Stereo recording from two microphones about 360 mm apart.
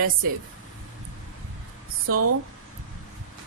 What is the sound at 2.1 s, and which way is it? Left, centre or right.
Speech, right.